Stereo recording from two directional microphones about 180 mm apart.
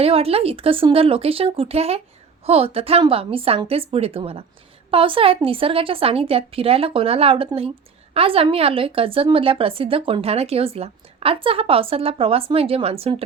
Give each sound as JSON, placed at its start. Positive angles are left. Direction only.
{"t": 0.0, "sound": "a woman's voice", "side_deg": -35}